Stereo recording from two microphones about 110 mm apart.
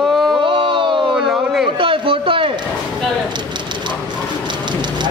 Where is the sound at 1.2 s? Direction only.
5° right (ahead or behind).